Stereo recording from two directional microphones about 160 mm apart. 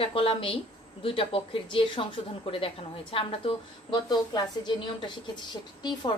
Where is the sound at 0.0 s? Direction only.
35° left (ahead or behind).